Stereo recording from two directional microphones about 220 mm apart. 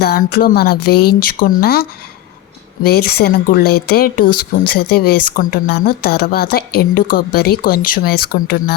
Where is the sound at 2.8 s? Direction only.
45° left (ahead or behind).